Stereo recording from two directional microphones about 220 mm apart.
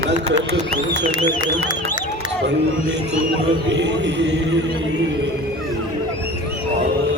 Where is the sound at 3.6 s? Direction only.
55° right (ahead or behind).